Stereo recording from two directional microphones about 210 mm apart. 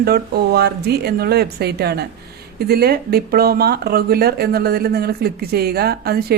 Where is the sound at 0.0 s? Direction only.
50° right (ahead or behind).